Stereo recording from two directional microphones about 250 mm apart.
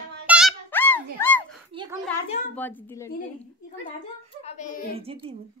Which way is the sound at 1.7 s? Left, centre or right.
Right.